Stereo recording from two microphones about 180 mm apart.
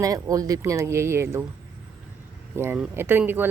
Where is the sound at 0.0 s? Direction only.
20° right (ahead or behind).